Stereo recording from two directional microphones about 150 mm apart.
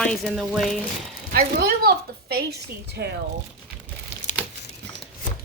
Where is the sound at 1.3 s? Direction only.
80° right.